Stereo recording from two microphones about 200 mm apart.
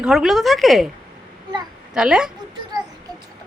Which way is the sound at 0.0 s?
Centre (ahead or behind).